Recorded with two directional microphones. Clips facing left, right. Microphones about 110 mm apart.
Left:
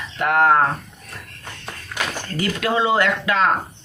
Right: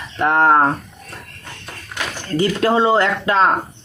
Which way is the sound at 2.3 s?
30° right (ahead or behind).